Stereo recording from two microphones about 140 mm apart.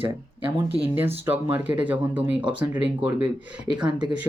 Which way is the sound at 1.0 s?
15° right (ahead or behind).